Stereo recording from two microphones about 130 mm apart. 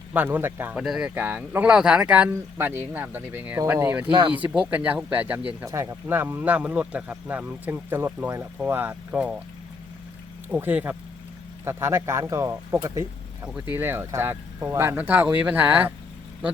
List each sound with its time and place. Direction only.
0.1 s speech: 15° right (ahead or behind)
4.0 s speech: 35° right (ahead or behind)
4.5 s speech: 10° right (ahead or behind)
10.5 s speech: 10° right (ahead or behind)